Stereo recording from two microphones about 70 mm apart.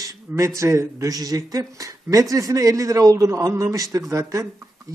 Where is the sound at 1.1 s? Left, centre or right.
Right.